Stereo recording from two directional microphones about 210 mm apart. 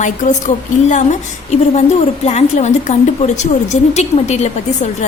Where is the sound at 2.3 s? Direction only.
30° left (ahead or behind).